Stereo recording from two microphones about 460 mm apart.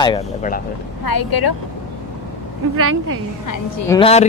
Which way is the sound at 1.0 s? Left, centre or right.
Left.